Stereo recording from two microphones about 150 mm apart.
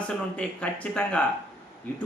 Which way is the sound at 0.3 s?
10° left (ahead or behind).